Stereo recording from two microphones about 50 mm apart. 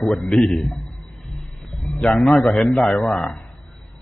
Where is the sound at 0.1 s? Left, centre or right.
Centre.